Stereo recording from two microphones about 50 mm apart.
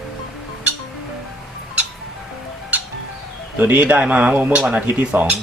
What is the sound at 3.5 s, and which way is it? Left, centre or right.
Speech, right.